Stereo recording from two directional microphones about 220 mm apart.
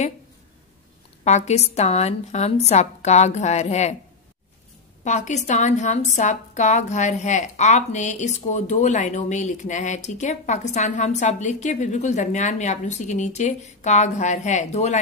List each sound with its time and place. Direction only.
1.2 s a woman's voice: 30° left (ahead or behind)
5.0 s a woman's voice: 35° left (ahead or behind)